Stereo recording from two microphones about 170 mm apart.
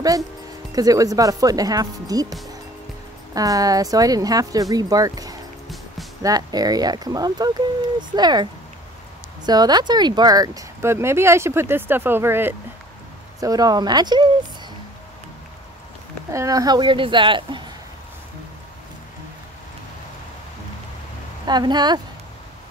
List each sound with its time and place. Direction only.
0.7 s speech: 20° right (ahead or behind)
3.3 s speech: 20° right (ahead or behind)
9.5 s speech: 25° right (ahead or behind)
16.3 s speech: 20° right (ahead or behind)
21.5 s speech: 25° right (ahead or behind)